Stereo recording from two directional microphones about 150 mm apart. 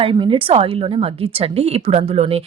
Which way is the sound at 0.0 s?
35° right (ahead or behind).